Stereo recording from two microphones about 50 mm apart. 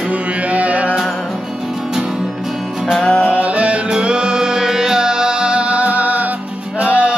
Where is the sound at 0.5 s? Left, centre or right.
Right.